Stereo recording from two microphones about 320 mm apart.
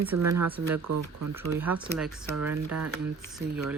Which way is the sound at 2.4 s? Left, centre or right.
Right.